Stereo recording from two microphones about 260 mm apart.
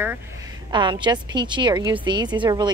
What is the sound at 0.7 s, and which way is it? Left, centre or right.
Speech, centre.